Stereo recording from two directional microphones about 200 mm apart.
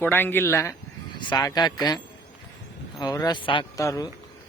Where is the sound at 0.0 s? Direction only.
10° left (ahead or behind).